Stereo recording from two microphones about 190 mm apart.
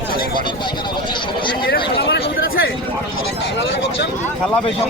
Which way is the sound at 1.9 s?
60° left (ahead or behind).